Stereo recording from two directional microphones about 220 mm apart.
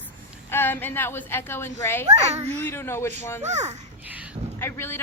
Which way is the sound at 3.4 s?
30° right (ahead or behind).